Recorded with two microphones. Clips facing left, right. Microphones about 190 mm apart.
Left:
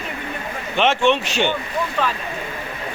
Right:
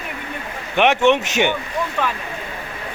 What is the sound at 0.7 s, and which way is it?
Speech, 15° right (ahead or behind).